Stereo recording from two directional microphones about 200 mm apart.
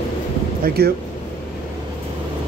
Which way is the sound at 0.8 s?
50° right (ahead or behind).